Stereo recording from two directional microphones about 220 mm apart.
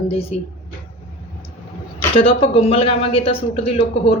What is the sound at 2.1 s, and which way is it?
Speech, 25° left (ahead or behind).